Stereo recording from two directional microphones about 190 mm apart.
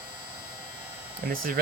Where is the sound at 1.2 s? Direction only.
50° right (ahead or behind).